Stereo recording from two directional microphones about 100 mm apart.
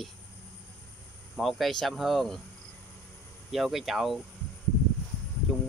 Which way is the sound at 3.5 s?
Centre (ahead or behind).